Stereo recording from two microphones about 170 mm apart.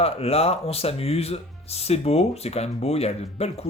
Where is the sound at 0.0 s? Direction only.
35° left (ahead or behind).